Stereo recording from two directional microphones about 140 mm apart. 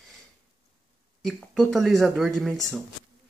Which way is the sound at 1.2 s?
Centre (ahead or behind).